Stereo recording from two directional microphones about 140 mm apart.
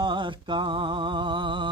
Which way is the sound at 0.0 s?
35° right (ahead or behind).